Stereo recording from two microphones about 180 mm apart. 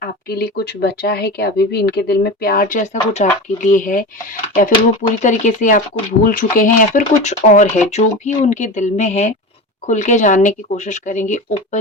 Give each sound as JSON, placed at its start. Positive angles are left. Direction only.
{"t": 0.3, "sound": "speech", "side_deg": 60}
{"t": 5.2, "sound": "speech", "side_deg": 45}